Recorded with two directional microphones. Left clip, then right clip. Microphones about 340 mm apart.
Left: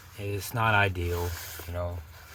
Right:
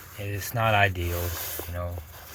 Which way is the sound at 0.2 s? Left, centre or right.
Centre.